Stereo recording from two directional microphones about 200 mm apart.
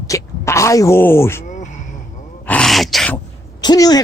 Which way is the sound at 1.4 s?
40° left (ahead or behind).